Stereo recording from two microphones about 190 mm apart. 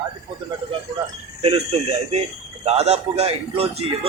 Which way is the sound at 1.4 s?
30° right (ahead or behind).